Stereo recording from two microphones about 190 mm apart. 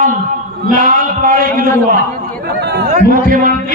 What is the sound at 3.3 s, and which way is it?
Speech, 45° right (ahead or behind).